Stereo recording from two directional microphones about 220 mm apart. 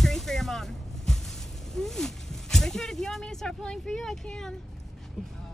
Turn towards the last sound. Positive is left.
turn(degrees=0)  # may be behind; listen again after turning